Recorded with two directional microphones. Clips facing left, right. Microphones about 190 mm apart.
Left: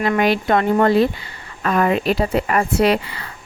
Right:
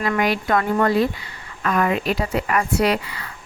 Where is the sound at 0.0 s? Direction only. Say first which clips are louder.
Left 4 dB; 25° left (ahead or behind).